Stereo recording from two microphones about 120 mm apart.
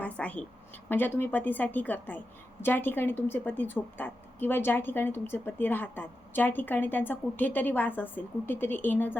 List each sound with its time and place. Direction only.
0.0 s a woman's voice: 10° left (ahead or behind)